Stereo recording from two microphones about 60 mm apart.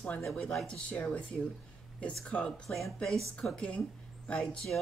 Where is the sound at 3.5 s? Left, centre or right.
Centre.